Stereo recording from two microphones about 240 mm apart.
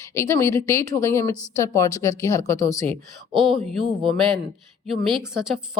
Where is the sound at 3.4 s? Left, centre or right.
Right.